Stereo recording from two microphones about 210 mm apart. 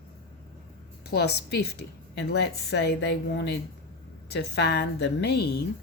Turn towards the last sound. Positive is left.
turn(degrees=55)  # may be behind; listen again after turning